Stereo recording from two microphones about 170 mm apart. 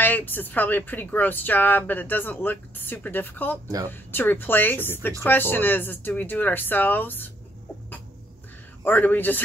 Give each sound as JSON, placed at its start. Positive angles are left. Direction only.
{"t": 0.0, "sound": "speech", "side_deg": 10}
{"t": 3.6, "sound": "speech", "side_deg": -20}
{"t": 3.9, "sound": "speech", "side_deg": 10}
{"t": 8.8, "sound": "speech", "side_deg": 10}